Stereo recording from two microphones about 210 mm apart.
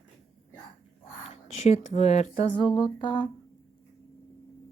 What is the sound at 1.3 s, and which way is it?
Speech, 35° left (ahead or behind).